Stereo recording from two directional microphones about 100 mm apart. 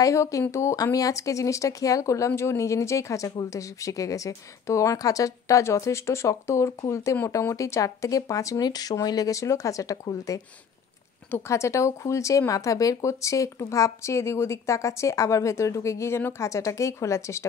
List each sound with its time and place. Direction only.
0.0 s speech: 30° left (ahead or behind)
11.2 s speech: 25° left (ahead or behind)